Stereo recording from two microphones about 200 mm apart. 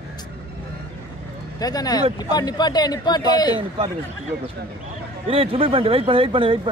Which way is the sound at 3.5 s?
30° right (ahead or behind).